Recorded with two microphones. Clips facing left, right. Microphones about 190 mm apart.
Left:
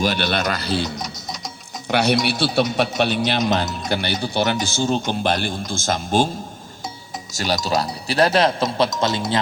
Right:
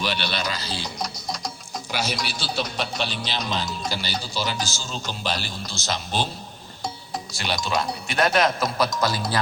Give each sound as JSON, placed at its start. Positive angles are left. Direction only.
{"t": 0.0, "sound": "a man's voice", "side_deg": 50}
{"t": 0.9, "sound": "music", "side_deg": 0}
{"t": 1.9, "sound": "a man's voice", "side_deg": 60}
{"t": 7.3, "sound": "speech", "side_deg": 40}